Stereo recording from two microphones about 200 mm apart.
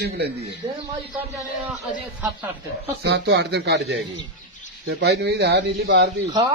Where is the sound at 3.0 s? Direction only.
60° right (ahead or behind).